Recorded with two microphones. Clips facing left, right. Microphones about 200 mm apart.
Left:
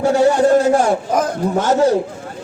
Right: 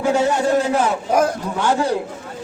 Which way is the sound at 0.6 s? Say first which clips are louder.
Left 5 dB; 45° left (ahead or behind).